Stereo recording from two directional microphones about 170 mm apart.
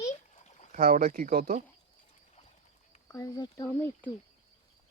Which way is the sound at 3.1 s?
20° left (ahead or behind).